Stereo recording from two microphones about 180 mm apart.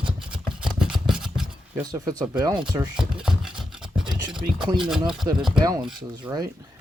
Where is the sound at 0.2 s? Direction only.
5° right (ahead or behind).